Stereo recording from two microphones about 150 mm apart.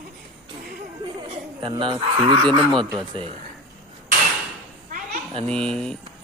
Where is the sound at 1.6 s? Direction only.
35° right (ahead or behind).